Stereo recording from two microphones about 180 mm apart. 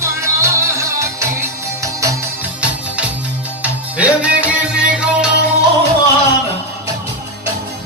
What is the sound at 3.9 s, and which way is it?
Music, 5° right (ahead or behind).